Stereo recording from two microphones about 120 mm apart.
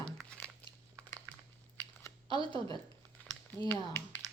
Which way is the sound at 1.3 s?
25° right (ahead or behind).